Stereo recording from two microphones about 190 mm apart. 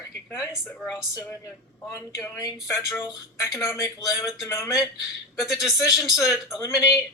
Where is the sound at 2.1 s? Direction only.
15° left (ahead or behind).